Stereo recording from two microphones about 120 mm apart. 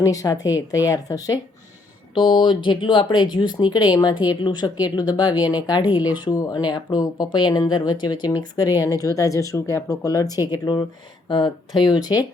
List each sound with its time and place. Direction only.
0.0 s speech: 25° left (ahead or behind)